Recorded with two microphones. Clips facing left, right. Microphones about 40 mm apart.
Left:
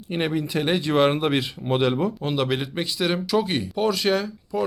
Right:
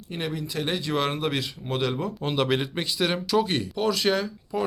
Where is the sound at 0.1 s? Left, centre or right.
Left.